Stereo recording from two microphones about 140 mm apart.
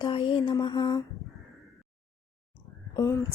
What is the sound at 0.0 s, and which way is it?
Mantra, 35° left (ahead or behind).